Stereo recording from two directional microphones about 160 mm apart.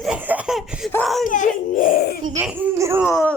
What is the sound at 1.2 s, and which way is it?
Speech, 55° left (ahead or behind).